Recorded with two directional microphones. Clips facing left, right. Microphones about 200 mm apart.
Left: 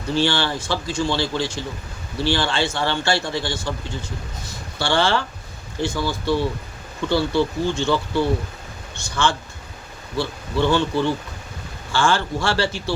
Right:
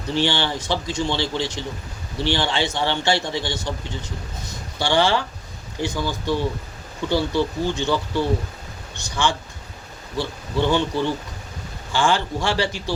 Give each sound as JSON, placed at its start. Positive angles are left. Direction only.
{"t": 0.2, "sound": "a man's voice", "side_deg": -20}
{"t": 10.2, "sound": "speech", "side_deg": -15}